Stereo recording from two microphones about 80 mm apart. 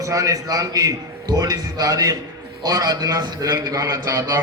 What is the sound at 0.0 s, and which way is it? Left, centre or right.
A man's voice, right.